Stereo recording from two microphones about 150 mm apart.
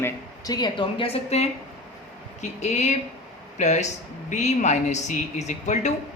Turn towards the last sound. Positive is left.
turn(degrees=50)  # may be behind; listen again after turning